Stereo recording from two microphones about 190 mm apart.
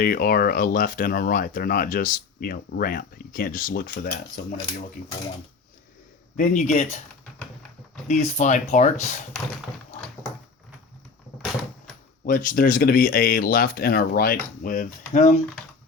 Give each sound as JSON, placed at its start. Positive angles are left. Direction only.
{"t": 0.0, "sound": "speech", "side_deg": 50}
{"t": 6.3, "sound": "speech", "side_deg": 40}
{"t": 8.0, "sound": "speech", "side_deg": 35}
{"t": 12.2, "sound": "speech", "side_deg": 45}